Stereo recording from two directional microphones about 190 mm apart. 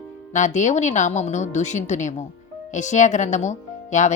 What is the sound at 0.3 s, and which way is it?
Speech, 40° left (ahead or behind).